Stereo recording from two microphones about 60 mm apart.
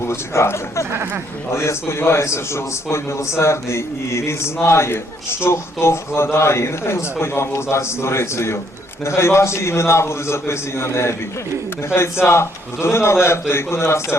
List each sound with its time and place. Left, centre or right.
0.0 s a man's voice: left
12.2 s a man's voice: left